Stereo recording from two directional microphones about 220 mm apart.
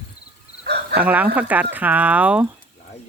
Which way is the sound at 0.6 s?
45° right (ahead or behind).